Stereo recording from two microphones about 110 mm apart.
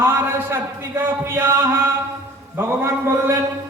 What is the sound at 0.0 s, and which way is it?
A man's voice, 20° right (ahead or behind).